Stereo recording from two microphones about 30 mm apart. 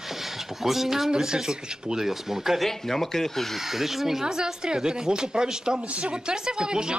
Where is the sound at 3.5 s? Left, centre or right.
Centre.